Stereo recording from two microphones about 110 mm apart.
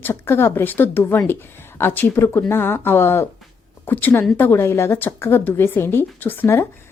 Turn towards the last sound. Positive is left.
turn(degrees=20)  # may be behind; listen again after turning